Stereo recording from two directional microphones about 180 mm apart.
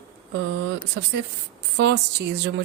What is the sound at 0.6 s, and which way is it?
A woman's voice, 75° right (ahead or behind).